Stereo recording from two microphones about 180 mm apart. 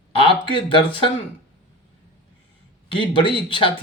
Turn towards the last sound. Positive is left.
turn(degrees=30)  # may be behind; listen again after turning